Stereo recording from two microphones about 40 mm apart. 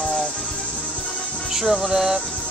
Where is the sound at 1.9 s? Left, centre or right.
Centre.